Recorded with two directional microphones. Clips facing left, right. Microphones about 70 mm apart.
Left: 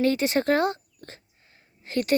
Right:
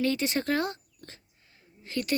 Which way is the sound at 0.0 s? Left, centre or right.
Left.